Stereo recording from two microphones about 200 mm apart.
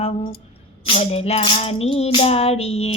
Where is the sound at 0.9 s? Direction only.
30° left (ahead or behind).